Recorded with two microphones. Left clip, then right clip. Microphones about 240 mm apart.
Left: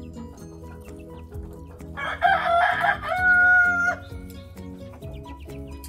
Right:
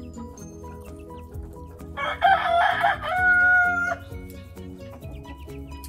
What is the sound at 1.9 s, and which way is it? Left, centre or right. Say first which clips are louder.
Chicken: right 1 dB; right.